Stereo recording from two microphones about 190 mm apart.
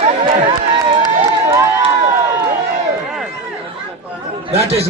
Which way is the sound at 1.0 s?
15° right (ahead or behind).